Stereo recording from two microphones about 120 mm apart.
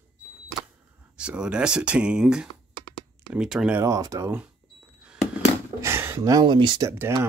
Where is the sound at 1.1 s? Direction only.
10° right (ahead or behind).